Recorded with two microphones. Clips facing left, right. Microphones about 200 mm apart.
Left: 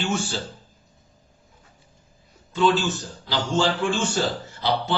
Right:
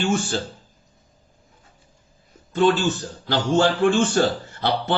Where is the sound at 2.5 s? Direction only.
55° right (ahead or behind).